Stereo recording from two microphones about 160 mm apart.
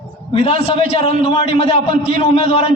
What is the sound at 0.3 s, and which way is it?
A man's voice, 40° left (ahead or behind).